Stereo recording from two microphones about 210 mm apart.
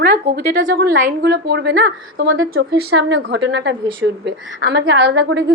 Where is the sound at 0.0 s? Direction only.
45° right (ahead or behind).